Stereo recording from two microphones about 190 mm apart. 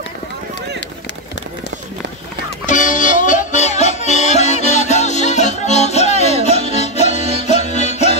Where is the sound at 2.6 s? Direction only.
40° left (ahead or behind).